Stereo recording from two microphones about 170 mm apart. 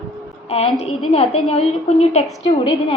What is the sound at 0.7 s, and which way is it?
A woman's voice, 35° left (ahead or behind).